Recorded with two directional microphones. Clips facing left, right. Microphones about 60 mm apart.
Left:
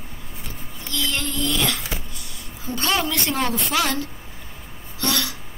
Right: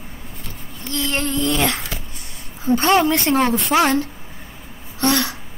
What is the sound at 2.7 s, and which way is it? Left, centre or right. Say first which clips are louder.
A woman's voice: right 8 dB; right.